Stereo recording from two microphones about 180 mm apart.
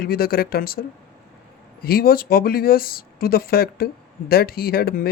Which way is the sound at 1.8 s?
55° left (ahead or behind).